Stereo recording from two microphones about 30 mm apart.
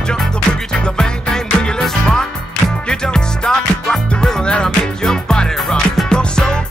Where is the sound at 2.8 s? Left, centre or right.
Left.